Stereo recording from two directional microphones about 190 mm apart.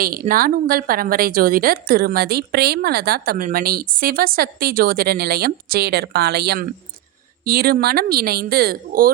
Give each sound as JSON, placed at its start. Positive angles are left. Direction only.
{"t": 0.0, "sound": "a woman's voice", "side_deg": -50}